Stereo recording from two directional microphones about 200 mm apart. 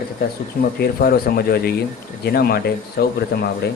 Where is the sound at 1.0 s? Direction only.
50° left (ahead or behind).